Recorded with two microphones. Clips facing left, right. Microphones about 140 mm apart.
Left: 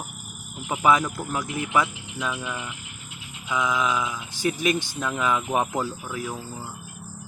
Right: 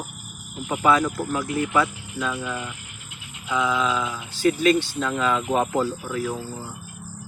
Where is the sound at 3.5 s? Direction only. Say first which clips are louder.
Right 2 dB; 15° left (ahead or behind).